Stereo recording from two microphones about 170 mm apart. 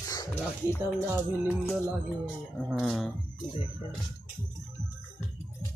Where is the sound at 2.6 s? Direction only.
Centre (ahead or behind).